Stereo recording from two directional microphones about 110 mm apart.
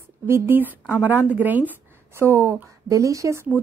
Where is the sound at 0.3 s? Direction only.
20° right (ahead or behind).